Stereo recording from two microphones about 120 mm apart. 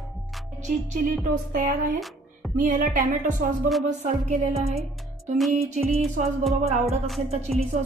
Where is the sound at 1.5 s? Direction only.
90° right.